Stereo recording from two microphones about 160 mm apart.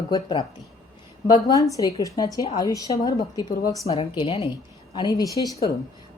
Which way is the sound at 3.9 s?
40° left (ahead or behind).